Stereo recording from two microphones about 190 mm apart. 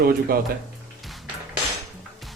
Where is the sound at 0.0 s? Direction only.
50° right (ahead or behind).